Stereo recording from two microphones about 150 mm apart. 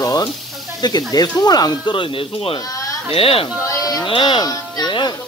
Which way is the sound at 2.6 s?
20° left (ahead or behind).